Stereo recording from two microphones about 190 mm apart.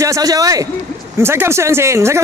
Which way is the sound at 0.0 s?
20° right (ahead or behind).